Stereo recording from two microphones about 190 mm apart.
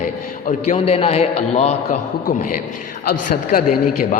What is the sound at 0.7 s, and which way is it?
A man's voice, 30° left (ahead or behind).